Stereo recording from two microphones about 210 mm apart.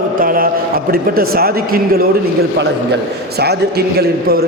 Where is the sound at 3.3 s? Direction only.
50° right (ahead or behind).